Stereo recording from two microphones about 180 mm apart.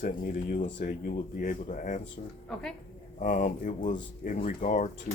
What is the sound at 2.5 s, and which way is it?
Speech, 5° left (ahead or behind).